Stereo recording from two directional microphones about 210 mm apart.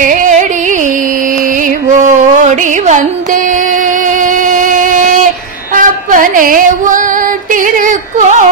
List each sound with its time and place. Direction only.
0.0 s music: 40° right (ahead or behind)
1.9 s music: 35° right (ahead or behind)
4.2 s a sound: 40° right (ahead or behind)
7.5 s yodeling: 40° right (ahead or behind)